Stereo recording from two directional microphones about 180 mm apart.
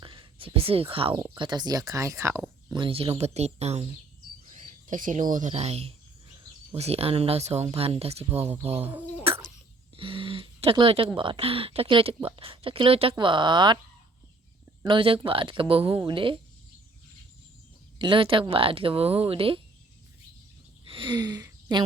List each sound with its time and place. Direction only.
0.0 s whispering: 30° right (ahead or behind)
1.1 s speech: 20° right (ahead or behind)
2.7 s speech: 30° right (ahead or behind)
4.5 s bird: 45° right (ahead or behind)
5.3 s speech: 40° right (ahead or behind)
8.2 s speech: 10° right (ahead or behind)
9.2 s bird: 30° right (ahead or behind)
9.9 s speech: 30° right (ahead or behind)
14.8 s speech: 30° right (ahead or behind)
18.0 s speech: 30° right (ahead or behind)
20.8 s speech: 30° right (ahead or behind)